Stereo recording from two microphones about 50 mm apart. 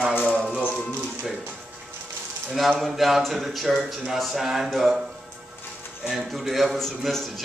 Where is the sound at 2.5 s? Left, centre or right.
Centre.